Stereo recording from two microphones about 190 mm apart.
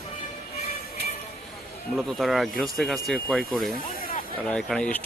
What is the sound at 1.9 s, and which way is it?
Speech, centre (ahead or behind).